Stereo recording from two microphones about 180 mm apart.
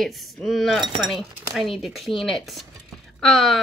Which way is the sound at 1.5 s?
Centre (ahead or behind).